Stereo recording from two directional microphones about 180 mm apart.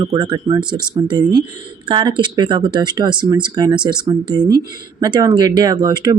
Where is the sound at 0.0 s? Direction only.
25° right (ahead or behind).